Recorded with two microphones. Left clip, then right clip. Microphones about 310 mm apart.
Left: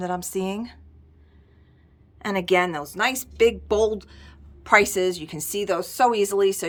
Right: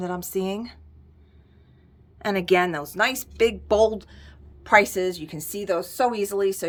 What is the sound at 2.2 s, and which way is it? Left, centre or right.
A woman's voice, centre.